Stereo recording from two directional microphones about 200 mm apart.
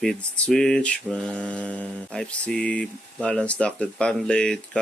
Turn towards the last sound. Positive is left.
turn(degrees=5)  # may be behind; listen again after turning